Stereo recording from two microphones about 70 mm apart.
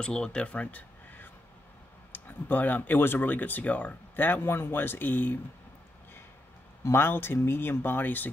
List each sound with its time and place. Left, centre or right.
0.0 s speech: centre; by 5.4 s left
6.8 s speech: left